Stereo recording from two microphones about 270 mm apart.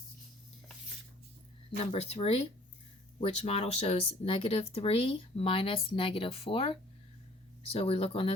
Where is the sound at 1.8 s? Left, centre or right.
Left.